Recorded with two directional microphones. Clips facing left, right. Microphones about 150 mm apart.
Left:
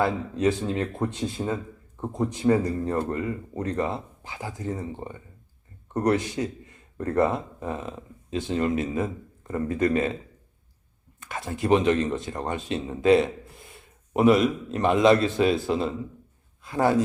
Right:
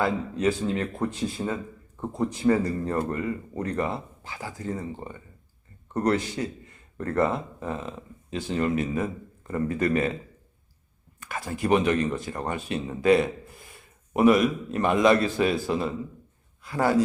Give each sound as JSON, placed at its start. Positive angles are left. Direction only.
{"t": 0.0, "sound": "speech", "side_deg": 25}
{"t": 11.2, "sound": "speech", "side_deg": 25}